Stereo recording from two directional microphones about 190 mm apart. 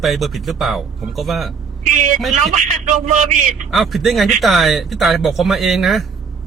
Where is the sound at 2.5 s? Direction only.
40° right (ahead or behind).